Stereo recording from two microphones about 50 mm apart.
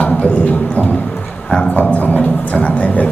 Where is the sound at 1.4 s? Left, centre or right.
Centre.